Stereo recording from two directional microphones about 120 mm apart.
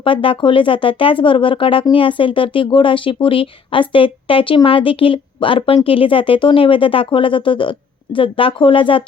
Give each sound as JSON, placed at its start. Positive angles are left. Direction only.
{"t": 0.0, "sound": "speech", "side_deg": 45}